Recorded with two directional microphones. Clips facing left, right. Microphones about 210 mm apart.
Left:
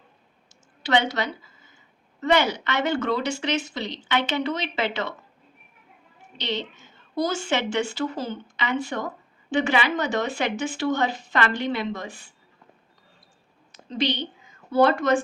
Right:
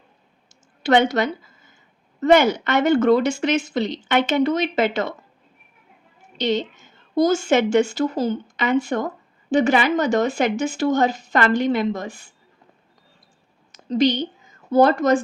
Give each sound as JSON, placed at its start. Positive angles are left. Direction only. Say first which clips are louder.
{"t": 0.8, "sound": "a woman's voice", "louder": "right 6 dB", "side_deg": -50}
{"t": 6.3, "sound": "a woman's voice", "louder": "right 8 dB", "side_deg": -45}
{"t": 13.8, "sound": "a woman's voice", "louder": "right 8 dB", "side_deg": -40}